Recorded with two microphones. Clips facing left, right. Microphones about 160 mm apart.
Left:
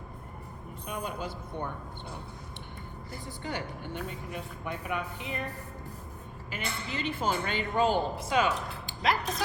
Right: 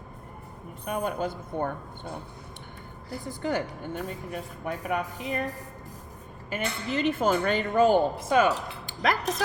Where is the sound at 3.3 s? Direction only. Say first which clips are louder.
Right 8 dB; 45° right (ahead or behind).